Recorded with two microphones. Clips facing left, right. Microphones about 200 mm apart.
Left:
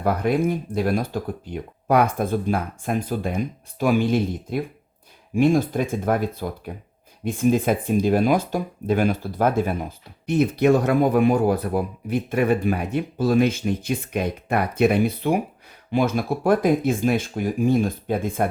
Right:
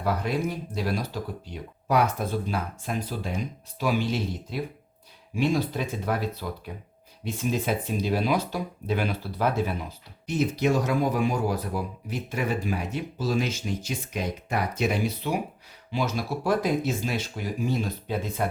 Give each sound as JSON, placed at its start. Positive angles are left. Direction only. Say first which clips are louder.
{"t": 0.0, "sound": "speech", "louder": "left 6 dB", "side_deg": 50}